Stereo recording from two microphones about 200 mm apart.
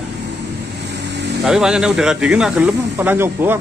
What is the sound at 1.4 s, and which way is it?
Speech, 5° right (ahead or behind).